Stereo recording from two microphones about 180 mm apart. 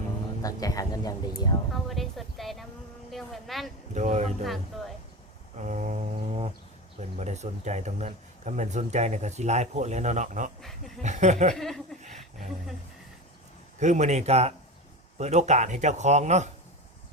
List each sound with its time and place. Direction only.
0.4 s speech: 20° left (ahead or behind)
1.7 s a sound: centre (ahead or behind)
3.1 s speech: centre (ahead or behind)
3.9 s speech: 40° right (ahead or behind)
4.4 s speech: centre (ahead or behind)
5.5 s a sound: 40° right (ahead or behind)
7.2 s speech: 40° right (ahead or behind)
10.6 s speech: centre (ahead or behind)
11.0 s speech: 40° right (ahead or behind)
11.5 s speech: centre (ahead or behind)
12.0 s a sound: 40° right (ahead or behind)
13.7 s speech: 40° right (ahead or behind)